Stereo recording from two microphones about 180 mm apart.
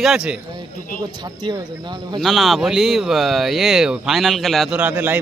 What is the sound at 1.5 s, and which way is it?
Speech, 25° right (ahead or behind).